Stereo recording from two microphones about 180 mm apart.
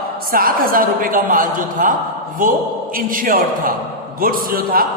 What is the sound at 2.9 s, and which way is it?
A woman's voice, 50° right (ahead or behind).